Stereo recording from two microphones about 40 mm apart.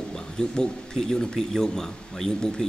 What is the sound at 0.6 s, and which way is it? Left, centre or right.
Speech, centre.